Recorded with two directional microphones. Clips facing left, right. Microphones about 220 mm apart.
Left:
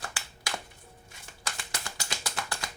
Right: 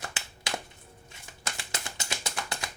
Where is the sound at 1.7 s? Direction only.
20° right (ahead or behind).